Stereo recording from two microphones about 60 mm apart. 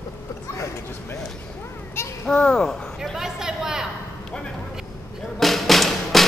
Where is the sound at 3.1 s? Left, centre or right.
Centre.